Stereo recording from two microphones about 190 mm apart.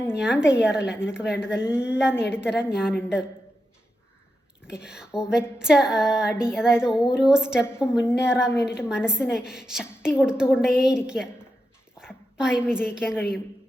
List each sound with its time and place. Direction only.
0.1 s speech: 5° right (ahead or behind)
4.6 s a woman's voice: 5° right (ahead or behind)